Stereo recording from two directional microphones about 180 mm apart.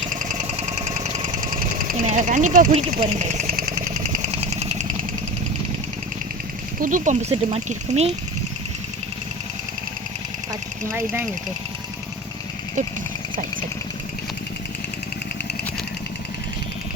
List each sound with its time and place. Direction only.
0.1 s engine: 45° right (ahead or behind)
1.4 s sewing machine: 50° right (ahead or behind)
6.7 s speech: 45° right (ahead or behind)